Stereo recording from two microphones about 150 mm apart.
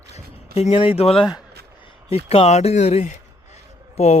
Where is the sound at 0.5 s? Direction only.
40° left (ahead or behind).